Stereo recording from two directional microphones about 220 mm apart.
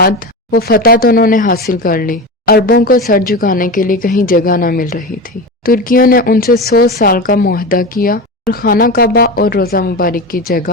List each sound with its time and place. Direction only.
0.5 s a woman's voice: 45° left (ahead or behind)